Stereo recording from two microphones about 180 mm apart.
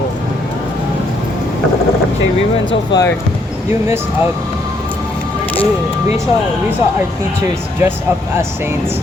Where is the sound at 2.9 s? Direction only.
15° left (ahead or behind).